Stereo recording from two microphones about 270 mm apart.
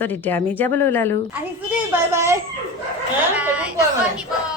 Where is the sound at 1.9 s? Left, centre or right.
Centre.